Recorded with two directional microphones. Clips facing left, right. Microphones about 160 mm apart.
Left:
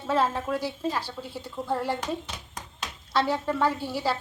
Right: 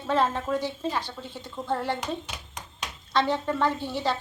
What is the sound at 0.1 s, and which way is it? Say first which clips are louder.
A woman's voice: right 1 dB; 5° left (ahead or behind).